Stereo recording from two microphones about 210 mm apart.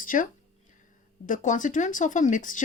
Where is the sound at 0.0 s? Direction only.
40° left (ahead or behind).